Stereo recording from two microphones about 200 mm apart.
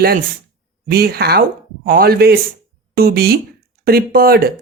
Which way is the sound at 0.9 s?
50° right (ahead or behind).